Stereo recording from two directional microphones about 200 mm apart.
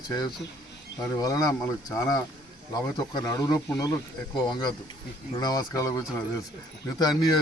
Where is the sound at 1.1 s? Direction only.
15° left (ahead or behind).